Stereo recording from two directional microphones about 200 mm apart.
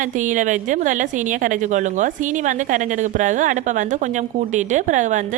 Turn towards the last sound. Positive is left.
turn(degrees=-40)  # may be behind; listen again after turning